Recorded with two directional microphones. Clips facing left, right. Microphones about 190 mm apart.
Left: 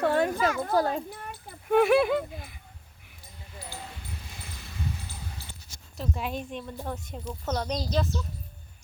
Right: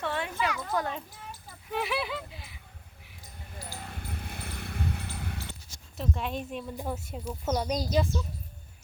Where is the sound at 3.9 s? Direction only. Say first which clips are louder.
Right 4 dB; 55° right (ahead or behind).